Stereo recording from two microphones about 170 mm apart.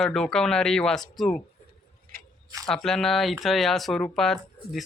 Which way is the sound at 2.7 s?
Centre (ahead or behind).